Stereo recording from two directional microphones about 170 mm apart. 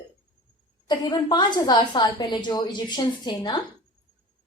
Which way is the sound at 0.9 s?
25° left (ahead or behind).